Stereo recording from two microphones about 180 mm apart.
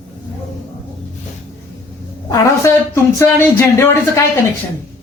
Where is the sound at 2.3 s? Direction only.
15° left (ahead or behind).